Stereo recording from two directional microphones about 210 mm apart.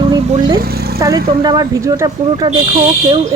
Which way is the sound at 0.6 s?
45° right (ahead or behind).